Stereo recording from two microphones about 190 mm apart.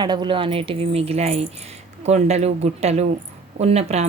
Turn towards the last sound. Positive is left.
turn(degrees=-35)  # may be behind; listen again after turning